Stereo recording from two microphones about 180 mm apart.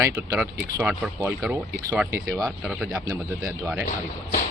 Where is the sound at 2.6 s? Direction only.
5° right (ahead or behind).